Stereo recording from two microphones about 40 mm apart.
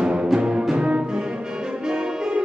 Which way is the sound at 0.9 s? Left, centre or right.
Right.